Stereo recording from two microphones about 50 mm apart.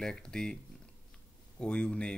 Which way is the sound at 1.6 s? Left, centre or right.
Left.